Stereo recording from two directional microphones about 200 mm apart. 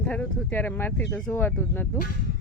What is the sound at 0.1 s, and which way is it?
Speech, 10° left (ahead or behind).